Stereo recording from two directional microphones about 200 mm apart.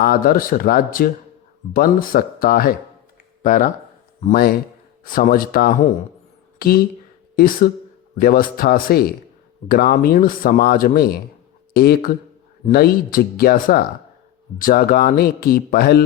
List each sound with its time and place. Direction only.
0.0 s speech: 45° left (ahead or behind)